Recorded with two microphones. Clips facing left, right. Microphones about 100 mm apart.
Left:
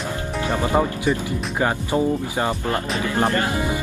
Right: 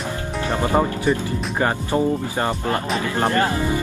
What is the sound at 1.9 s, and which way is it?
Speech, 10° left (ahead or behind).